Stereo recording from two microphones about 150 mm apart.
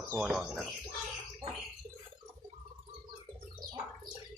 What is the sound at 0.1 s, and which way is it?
Speech, 5° right (ahead or behind).